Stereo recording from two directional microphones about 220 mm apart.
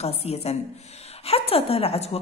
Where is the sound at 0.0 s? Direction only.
30° left (ahead or behind).